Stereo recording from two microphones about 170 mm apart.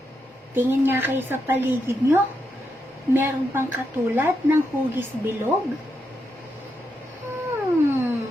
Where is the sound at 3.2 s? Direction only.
15° right (ahead or behind).